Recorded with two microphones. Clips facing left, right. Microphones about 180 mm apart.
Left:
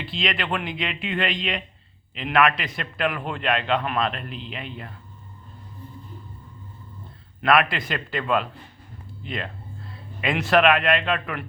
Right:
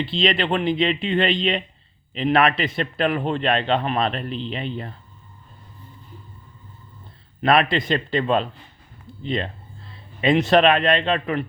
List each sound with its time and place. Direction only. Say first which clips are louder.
0.0 s a man's voice: right 7 dB; 30° right (ahead or behind)
7.4 s speech: right 2 dB; 25° right (ahead or behind)